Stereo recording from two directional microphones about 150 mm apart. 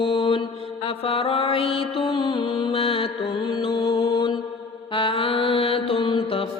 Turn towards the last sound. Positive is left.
turn(degrees=35)  # may be behind; listen again after turning